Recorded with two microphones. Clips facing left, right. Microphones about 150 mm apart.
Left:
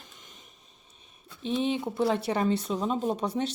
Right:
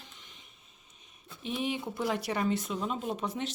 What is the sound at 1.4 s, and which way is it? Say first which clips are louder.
Speech: left 5 dB; 25° left (ahead or behind).